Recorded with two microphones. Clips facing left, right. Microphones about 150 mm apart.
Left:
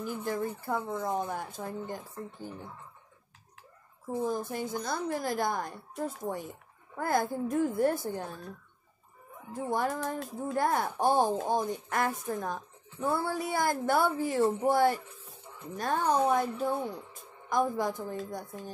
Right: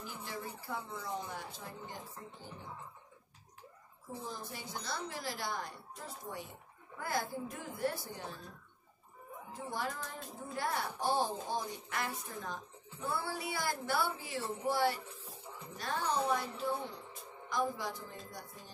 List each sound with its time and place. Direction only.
0.0 s speech: 50° left (ahead or behind)
4.2 s speech: 50° left (ahead or behind)
9.5 s speech: 50° left (ahead or behind)
9.9 s music: 70° left (ahead or behind)
10.5 s speech: 50° left (ahead or behind)